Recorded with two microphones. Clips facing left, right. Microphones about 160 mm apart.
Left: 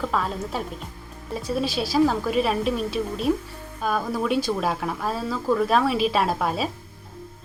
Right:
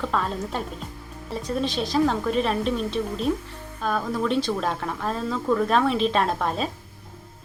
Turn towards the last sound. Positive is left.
turn(degrees=5)  # may be behind; listen again after turning